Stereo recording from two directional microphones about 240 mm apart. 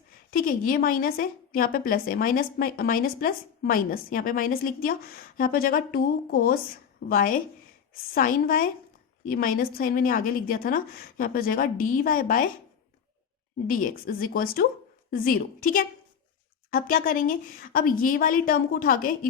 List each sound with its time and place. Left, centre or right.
0.3 s a woman's voice: left
13.7 s a woman's voice: left